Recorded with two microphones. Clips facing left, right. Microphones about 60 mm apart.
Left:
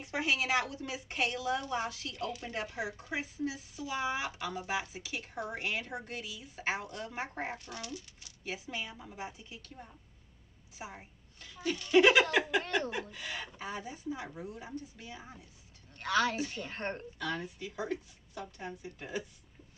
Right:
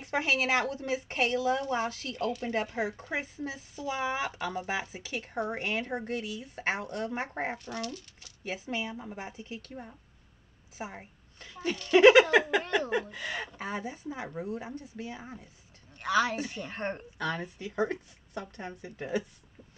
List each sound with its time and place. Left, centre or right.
0.0 s speech: right
7.8 s speech: centre
8.5 s speech: right
13.1 s speech: right
16.0 s a woman's voice: centre
17.6 s speech: right